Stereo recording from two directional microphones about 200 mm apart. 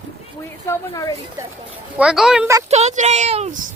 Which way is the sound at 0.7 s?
15° left (ahead or behind).